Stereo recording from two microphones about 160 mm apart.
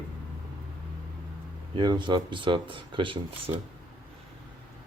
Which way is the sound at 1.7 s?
30° right (ahead or behind).